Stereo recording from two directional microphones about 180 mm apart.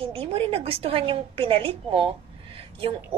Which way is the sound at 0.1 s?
30° right (ahead or behind).